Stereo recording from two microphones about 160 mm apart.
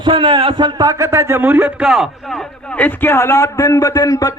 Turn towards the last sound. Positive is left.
turn(degrees=20)  # may be behind; listen again after turning